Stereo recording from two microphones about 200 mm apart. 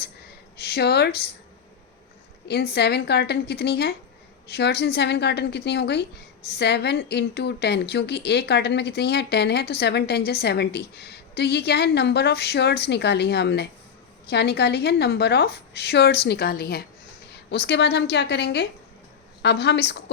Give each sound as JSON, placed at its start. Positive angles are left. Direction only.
{"t": 0.5, "sound": "speech", "side_deg": 55}
{"t": 2.5, "sound": "a woman's voice", "side_deg": 55}